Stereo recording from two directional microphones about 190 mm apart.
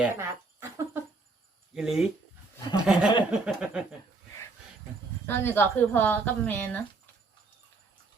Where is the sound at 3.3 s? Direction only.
5° right (ahead or behind).